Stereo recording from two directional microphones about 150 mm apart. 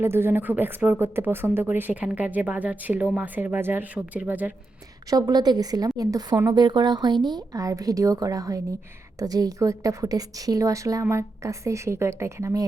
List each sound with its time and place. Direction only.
0.0 s speech: 15° right (ahead or behind)
5.0 s a woman's voice: 25° right (ahead or behind)